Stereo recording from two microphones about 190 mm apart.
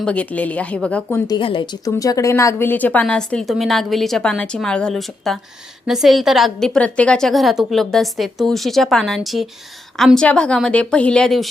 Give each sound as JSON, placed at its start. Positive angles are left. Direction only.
{"t": 0.0, "sound": "speech", "side_deg": 5}
{"t": 1.3, "sound": "a woman's voice", "side_deg": 25}